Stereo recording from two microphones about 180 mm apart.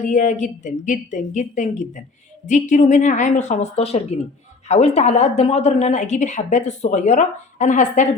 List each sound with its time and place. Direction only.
0.1 s a woman's voice: 45° left (ahead or behind)